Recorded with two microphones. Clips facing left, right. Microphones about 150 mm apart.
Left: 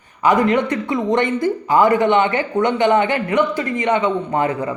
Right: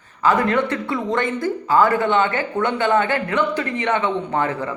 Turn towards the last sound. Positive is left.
turn(degrees=15)  # may be behind; listen again after turning